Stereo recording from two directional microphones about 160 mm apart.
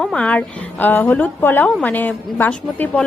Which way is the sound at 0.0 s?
5° left (ahead or behind).